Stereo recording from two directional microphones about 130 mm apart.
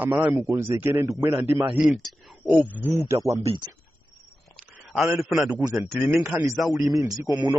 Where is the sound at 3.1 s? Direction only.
45° right (ahead or behind).